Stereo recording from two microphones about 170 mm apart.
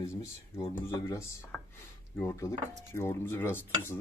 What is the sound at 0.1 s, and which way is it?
Dishes, 15° left (ahead or behind).